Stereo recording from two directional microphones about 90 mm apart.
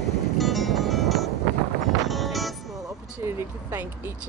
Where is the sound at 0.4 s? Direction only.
Centre (ahead or behind).